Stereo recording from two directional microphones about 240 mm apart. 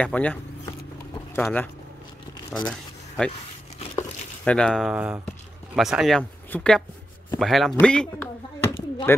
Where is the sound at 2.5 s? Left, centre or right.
Centre.